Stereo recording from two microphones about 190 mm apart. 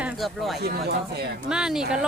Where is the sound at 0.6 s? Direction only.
60° right (ahead or behind).